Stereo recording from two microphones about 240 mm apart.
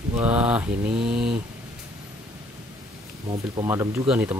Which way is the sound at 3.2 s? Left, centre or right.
Centre.